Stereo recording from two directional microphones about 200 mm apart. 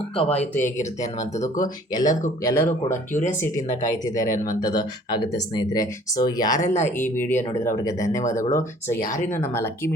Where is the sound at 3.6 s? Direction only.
35° left (ahead or behind).